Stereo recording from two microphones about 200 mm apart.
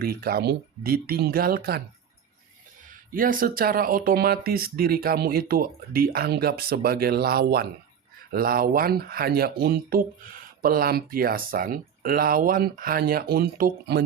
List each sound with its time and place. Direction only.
0.0 s speech: 50° right (ahead or behind)
3.1 s speech: 45° right (ahead or behind)